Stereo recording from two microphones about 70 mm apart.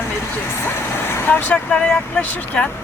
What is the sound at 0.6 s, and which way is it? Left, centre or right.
Vehicle, left.